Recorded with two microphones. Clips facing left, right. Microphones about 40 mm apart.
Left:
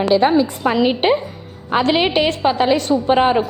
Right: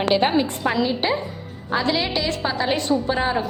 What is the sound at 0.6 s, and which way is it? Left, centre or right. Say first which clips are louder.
Speech: left 6 dB; left.